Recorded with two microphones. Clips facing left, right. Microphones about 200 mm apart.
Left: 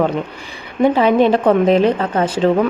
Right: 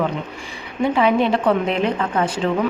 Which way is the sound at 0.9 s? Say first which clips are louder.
Left 2 dB; 40° left (ahead or behind).